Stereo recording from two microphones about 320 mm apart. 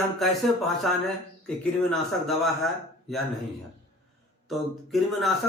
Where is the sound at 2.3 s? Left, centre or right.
Centre.